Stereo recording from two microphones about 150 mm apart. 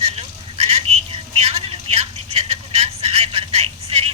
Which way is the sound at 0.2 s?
45° right (ahead or behind).